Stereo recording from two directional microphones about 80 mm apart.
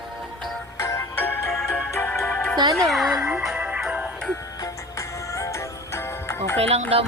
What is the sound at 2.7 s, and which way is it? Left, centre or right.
Speech, centre.